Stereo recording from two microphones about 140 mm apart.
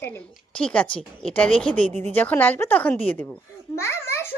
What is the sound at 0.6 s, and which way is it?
Speech, 10° left (ahead or behind).